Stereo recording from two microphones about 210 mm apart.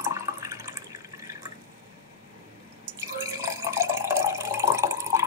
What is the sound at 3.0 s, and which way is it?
Water, 10° right (ahead or behind).